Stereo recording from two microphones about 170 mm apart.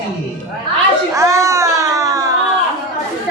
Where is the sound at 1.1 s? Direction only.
20° right (ahead or behind).